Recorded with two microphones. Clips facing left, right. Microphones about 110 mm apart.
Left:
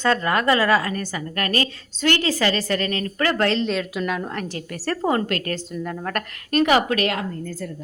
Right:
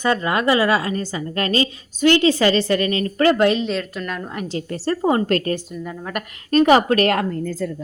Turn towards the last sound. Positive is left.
turn(degrees=-45)  # may be behind; listen again after turning